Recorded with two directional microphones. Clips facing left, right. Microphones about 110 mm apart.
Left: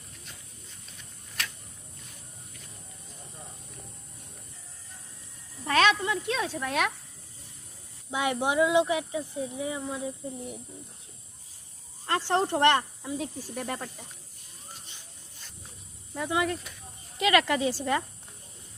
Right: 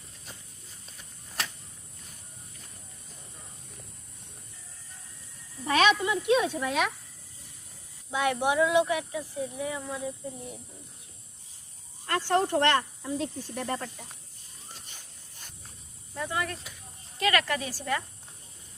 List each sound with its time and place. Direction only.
5.6 s speech: 15° right (ahead or behind)
6.7 s speech: centre (ahead or behind)
8.1 s speech: 20° left (ahead or behind)
12.0 s speech: 25° left (ahead or behind)
16.1 s speech: 15° left (ahead or behind)